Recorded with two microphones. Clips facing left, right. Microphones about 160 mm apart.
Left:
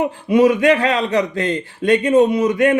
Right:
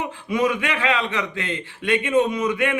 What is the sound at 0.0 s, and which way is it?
A man's voice, 35° left (ahead or behind).